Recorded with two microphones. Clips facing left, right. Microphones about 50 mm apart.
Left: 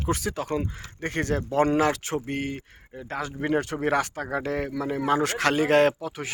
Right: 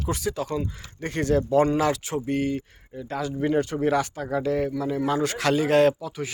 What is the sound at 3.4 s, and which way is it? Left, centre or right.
A man's voice, left.